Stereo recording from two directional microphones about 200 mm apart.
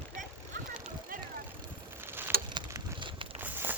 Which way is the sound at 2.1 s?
10° right (ahead or behind).